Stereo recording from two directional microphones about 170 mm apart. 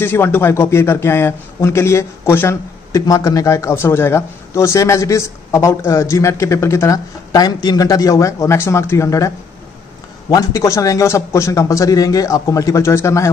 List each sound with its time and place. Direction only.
0.0 s a man's voice: 15° left (ahead or behind)
10.3 s speech: 20° left (ahead or behind)